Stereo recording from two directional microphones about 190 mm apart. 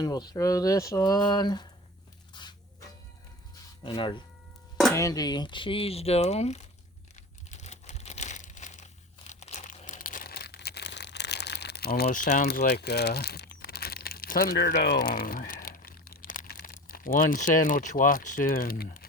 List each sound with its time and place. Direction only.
0.0 s speech: 20° left (ahead or behind)
2.3 s a sound: 25° left (ahead or behind)
3.8 s speech: 25° left (ahead or behind)
7.5 s crumpling: 35° left (ahead or behind)
12.5 s speech: 60° left (ahead or behind)